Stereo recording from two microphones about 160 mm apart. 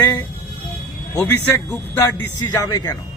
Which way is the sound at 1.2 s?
15° left (ahead or behind).